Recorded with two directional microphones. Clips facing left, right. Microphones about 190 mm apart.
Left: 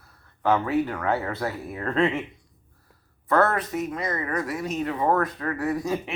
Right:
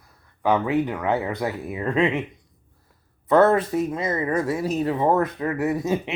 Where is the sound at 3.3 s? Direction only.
25° right (ahead or behind).